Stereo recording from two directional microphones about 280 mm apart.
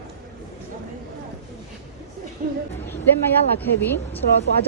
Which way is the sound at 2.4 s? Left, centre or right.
Right.